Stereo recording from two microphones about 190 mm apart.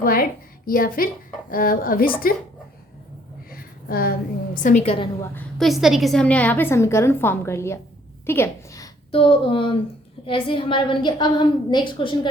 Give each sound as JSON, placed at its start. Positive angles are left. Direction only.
{"t": 0.0, "sound": "speech", "side_deg": 50}
{"t": 3.5, "sound": "a sound", "side_deg": 50}
{"t": 4.6, "sound": "a woman's voice", "side_deg": 35}
{"t": 5.3, "sound": "a woman's voice", "side_deg": 5}
{"t": 9.1, "sound": "a woman's voice", "side_deg": 30}